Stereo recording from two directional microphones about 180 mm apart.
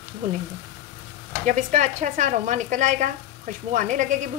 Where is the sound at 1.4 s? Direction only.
40° right (ahead or behind).